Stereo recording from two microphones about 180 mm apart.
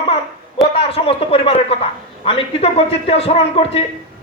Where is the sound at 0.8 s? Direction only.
30° left (ahead or behind).